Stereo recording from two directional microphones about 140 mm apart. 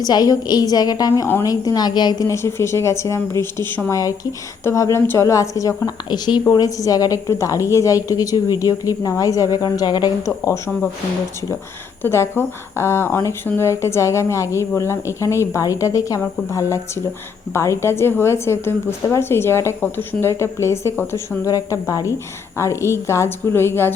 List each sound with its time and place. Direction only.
0.0 s a woman's voice: 25° left (ahead or behind)
12.0 s a woman's voice: 15° left (ahead or behind)